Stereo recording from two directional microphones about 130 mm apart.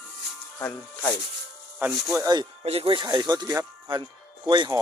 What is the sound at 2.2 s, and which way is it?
Speech, 30° right (ahead or behind).